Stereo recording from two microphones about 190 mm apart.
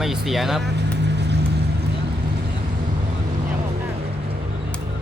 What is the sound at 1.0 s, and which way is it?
Vehicle, 65° right (ahead or behind).